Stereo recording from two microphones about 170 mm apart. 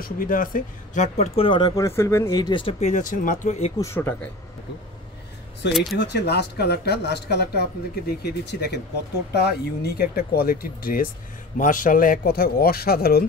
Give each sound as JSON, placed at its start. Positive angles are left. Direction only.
{"t": 0.0, "sound": "speech", "side_deg": 55}
{"t": 2.6, "sound": "speech", "side_deg": 45}
{"t": 3.7, "sound": "speech", "side_deg": 15}
{"t": 5.6, "sound": "speech", "side_deg": 90}
{"t": 5.9, "sound": "speech", "side_deg": 75}